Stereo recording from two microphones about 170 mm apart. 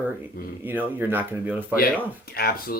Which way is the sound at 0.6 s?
10° right (ahead or behind).